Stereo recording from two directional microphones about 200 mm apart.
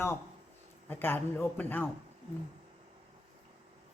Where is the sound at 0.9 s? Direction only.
10° left (ahead or behind).